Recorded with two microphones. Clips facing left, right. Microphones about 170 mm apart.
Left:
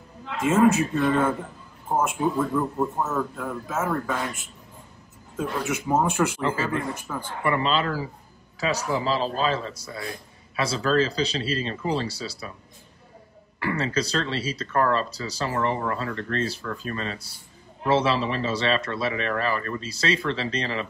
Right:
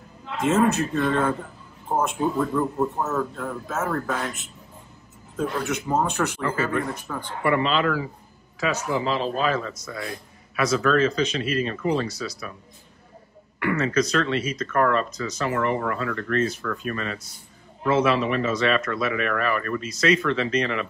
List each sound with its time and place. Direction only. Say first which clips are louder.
0.4 s speech: left 1 dB; centre (ahead or behind)
5.3 s speech: right 1 dB; centre (ahead or behind)
6.4 s speech: even; 30° left (ahead or behind)
7.1 s speech: even; 5° left (ahead or behind)
8.6 s speech: even; 35° left (ahead or behind)
13.6 s speech: right 4 dB; 30° left (ahead or behind)